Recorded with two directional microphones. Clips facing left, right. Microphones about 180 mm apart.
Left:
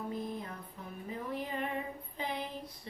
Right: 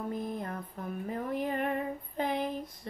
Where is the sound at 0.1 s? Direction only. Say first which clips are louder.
Right 4 dB; 50° right (ahead or behind).